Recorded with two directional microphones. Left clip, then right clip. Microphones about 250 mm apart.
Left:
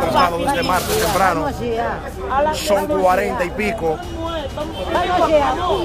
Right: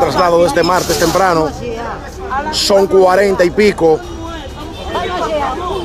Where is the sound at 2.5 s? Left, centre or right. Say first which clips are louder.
Right 6 dB; right.